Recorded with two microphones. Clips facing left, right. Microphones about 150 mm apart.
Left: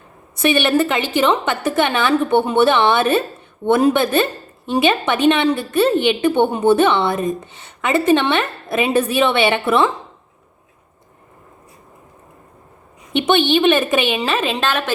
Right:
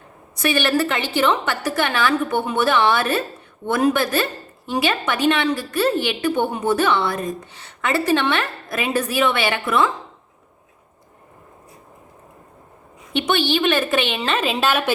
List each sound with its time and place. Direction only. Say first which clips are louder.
0.3 s a woman's voice: left 4 dB; 20° left (ahead or behind)
13.1 s a woman's voice: left 5 dB; 20° left (ahead or behind)
14.3 s a woman's voice: even; centre (ahead or behind)